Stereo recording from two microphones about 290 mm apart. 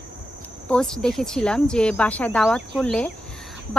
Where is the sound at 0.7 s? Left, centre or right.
Centre.